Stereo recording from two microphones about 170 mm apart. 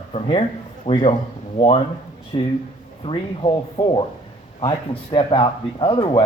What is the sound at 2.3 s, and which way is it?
Speech, 30° left (ahead or behind).